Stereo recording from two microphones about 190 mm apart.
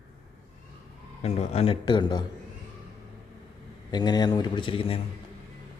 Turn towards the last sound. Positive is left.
turn(degrees=30)  # may be behind; listen again after turning